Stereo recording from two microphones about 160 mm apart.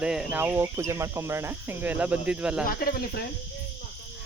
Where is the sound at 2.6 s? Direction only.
65° left (ahead or behind).